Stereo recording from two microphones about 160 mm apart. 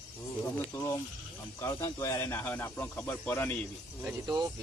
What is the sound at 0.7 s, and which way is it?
Speech, 15° left (ahead or behind).